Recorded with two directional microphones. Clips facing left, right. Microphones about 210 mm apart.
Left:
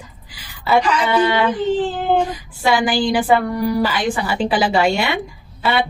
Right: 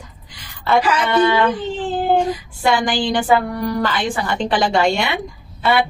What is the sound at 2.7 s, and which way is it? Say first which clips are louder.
A woman's voice: left 1 dB; 5° left (ahead or behind).